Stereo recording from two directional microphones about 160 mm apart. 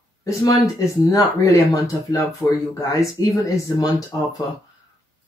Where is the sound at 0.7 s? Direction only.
20° left (ahead or behind).